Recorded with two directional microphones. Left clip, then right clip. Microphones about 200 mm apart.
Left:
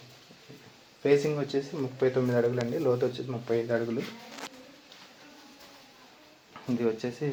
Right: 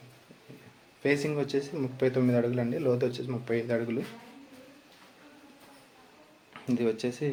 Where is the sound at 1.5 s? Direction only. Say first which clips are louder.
Even; 10° right (ahead or behind).